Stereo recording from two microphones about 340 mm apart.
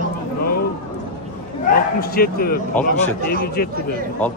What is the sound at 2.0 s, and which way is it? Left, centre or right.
Speech, left.